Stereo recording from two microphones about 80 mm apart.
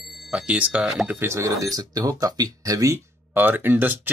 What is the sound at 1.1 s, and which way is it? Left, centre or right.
Speech, right.